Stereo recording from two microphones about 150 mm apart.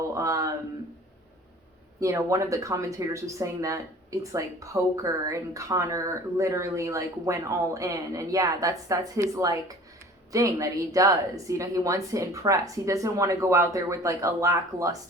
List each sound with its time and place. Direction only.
0.1 s speech: 20° right (ahead or behind)
2.0 s speech: 20° right (ahead or behind)